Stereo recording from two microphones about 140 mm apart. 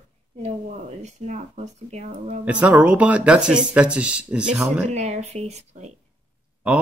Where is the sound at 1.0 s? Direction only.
55° right (ahead or behind).